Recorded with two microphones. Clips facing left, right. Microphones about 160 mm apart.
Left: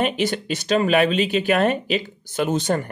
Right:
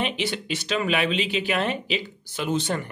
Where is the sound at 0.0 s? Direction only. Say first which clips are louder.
Left 6 dB; 45° left (ahead or behind).